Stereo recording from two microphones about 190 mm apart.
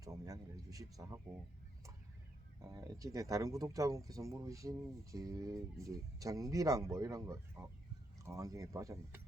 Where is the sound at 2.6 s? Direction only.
15° right (ahead or behind).